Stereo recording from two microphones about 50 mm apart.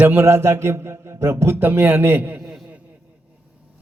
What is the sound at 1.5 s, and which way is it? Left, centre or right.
Speech, right.